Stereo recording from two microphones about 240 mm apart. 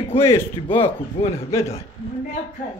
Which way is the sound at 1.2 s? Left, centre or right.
Left.